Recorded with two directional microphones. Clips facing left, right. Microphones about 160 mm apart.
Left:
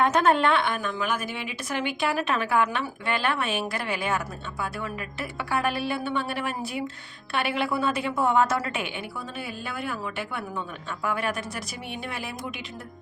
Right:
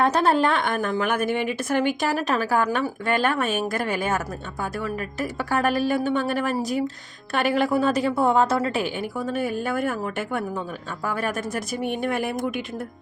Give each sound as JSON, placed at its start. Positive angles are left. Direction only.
{"t": 0.0, "sound": "a woman's voice", "side_deg": -35}